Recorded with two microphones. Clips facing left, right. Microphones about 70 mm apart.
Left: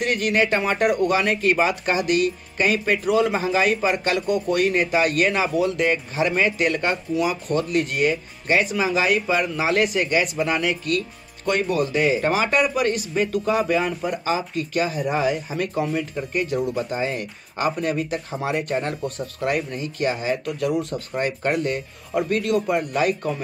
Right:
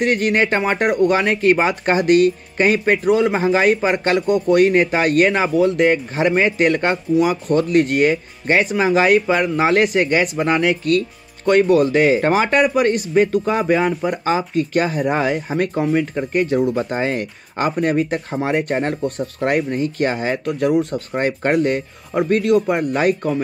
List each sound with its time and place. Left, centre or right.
0.0 s speech: right